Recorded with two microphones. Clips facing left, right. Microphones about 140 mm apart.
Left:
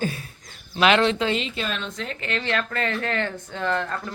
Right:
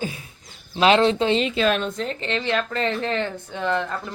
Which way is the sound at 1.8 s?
35° right (ahead or behind).